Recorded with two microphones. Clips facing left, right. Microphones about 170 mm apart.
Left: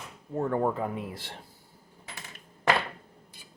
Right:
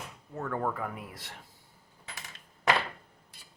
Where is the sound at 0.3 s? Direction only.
25° left (ahead or behind).